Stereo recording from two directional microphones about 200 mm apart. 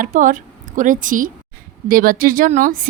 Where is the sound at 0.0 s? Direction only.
40° right (ahead or behind).